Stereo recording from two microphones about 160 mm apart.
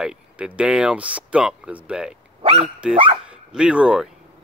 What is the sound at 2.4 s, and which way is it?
Dog, 40° right (ahead or behind).